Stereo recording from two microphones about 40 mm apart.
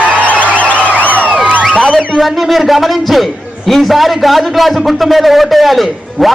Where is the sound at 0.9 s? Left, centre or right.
Left.